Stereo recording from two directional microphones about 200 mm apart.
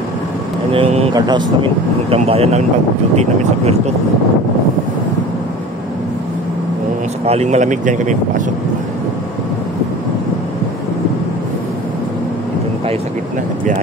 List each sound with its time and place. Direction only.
0.7 s vehicle: 25° right (ahead or behind)
1.1 s speech: 20° right (ahead or behind)
7.2 s speech: 35° right (ahead or behind)